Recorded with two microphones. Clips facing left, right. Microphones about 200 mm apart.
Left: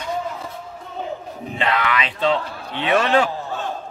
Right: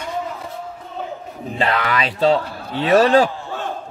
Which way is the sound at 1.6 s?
35° right (ahead or behind).